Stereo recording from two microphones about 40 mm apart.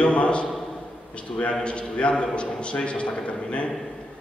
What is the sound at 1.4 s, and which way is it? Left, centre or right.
A man's voice, left.